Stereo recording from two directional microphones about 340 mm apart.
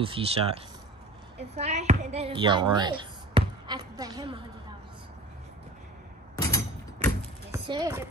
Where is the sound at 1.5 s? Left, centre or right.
Centre.